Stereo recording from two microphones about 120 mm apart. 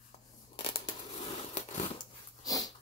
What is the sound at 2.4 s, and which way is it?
Dog, 30° left (ahead or behind).